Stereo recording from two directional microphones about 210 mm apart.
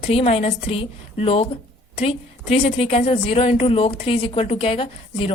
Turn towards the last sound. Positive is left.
turn(degrees=25)  # may be behind; listen again after turning